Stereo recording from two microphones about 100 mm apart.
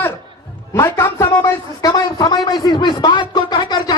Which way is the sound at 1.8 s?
40° left (ahead or behind).